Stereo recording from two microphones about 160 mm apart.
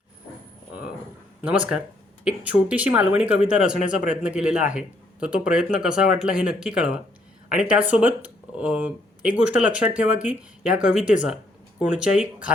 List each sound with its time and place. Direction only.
1.4 s speech: 10° right (ahead or behind)
3.8 s a man's voice: 55° left (ahead or behind)
4.1 s speech: 5° right (ahead or behind)